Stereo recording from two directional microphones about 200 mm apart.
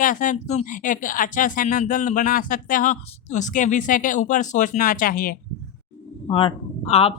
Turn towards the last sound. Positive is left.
turn(degrees=30)  # may be behind; listen again after turning